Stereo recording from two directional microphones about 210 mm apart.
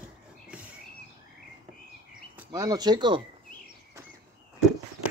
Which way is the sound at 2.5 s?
20° right (ahead or behind).